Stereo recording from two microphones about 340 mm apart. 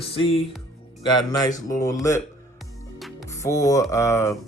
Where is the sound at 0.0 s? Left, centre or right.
Centre.